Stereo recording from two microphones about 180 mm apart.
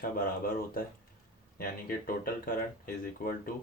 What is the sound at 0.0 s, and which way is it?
Speech, 55° left (ahead or behind).